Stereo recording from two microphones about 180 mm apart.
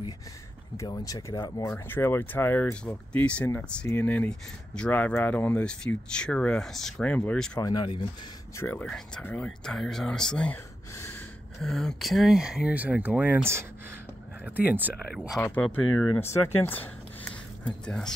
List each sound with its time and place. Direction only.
0.7 s speech: 20° left (ahead or behind)
7.5 s speech: 20° left (ahead or behind)
8.5 s speech: 10° left (ahead or behind)
11.6 s speech: 5° left (ahead or behind)
14.4 s speech: 10° right (ahead or behind)
15.4 s speech: 10° left (ahead or behind)